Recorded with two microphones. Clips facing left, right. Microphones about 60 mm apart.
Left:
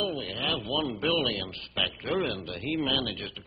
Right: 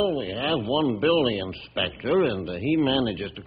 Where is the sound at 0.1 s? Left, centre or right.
Centre.